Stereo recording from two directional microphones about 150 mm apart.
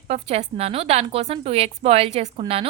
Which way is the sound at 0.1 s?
45° right (ahead or behind).